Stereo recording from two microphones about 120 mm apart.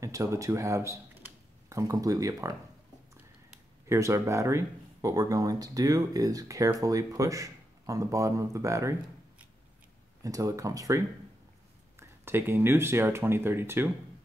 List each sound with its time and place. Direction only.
0.0 s speech: 25° right (ahead or behind)
3.8 s speech: 25° right (ahead or behind)
10.2 s speech: 30° right (ahead or behind)